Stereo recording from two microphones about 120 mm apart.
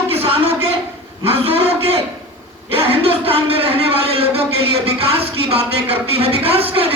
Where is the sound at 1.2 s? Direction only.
55° right (ahead or behind).